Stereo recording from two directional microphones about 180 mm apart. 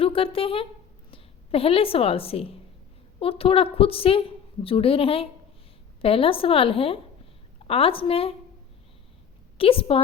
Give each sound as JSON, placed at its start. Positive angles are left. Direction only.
{"t": 0.0, "sound": "a woman's voice", "side_deg": 30}
{"t": 9.6, "sound": "a woman's voice", "side_deg": 30}